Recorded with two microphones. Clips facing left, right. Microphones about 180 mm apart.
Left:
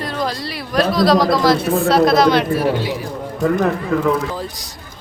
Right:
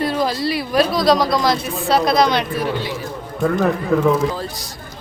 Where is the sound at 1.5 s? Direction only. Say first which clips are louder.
Left 8 dB; 60° left (ahead or behind).